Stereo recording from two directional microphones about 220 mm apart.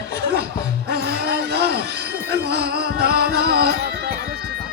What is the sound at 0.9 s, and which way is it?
Music, 45° right (ahead or behind).